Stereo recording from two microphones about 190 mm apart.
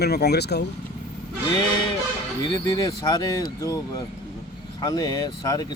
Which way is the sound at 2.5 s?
20° left (ahead or behind).